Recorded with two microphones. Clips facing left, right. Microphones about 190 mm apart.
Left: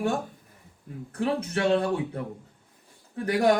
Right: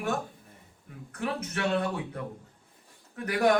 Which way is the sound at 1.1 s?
30° left (ahead or behind).